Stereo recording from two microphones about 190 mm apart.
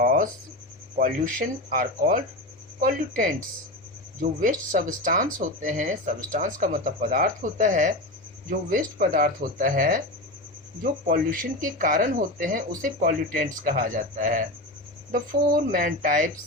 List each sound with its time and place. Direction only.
0.0 s a sound: 50° right (ahead or behind)
0.9 s speech: 45° right (ahead or behind)
11.1 s speech: 45° right (ahead or behind)
15.7 s speech: 45° right (ahead or behind)